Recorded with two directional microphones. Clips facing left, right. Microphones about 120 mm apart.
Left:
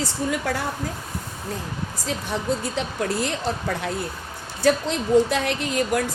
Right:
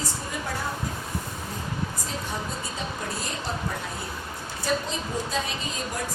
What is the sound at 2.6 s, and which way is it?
Speech, 75° left (ahead or behind).